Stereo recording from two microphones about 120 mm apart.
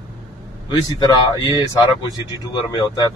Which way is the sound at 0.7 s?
40° left (ahead or behind).